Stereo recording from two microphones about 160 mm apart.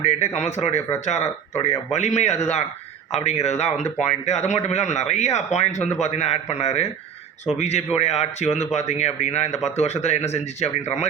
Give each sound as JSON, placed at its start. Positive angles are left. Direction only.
{"t": 0.0, "sound": "speech", "side_deg": 45}